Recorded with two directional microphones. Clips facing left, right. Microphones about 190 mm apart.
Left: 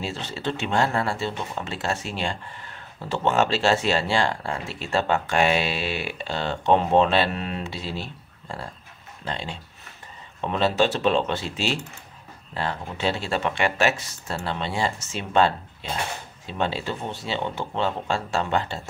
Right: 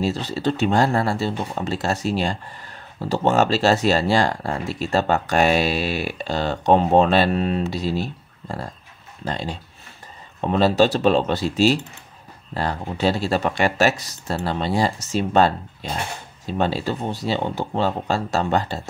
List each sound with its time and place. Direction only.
0.0 s speech: 40° right (ahead or behind)